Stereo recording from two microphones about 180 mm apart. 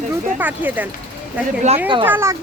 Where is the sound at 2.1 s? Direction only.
15° right (ahead or behind).